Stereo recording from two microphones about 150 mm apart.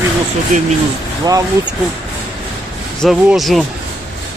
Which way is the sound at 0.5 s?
65° right (ahead or behind).